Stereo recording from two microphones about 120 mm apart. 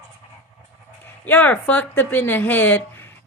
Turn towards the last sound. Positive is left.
turn(degrees=15)  # may be behind; listen again after turning